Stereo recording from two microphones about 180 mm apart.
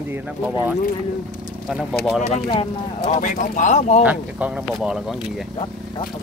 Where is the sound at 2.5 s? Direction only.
25° left (ahead or behind).